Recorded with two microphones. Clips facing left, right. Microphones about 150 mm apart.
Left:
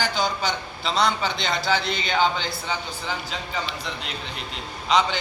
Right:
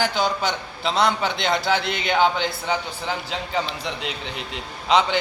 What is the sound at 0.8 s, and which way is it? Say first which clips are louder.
A man's voice: right 2 dB; 60° right (ahead or behind).